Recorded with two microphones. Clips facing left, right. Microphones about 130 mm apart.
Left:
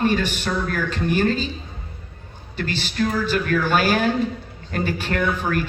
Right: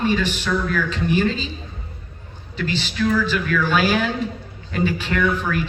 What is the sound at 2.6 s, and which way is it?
Speech, 50° left (ahead or behind).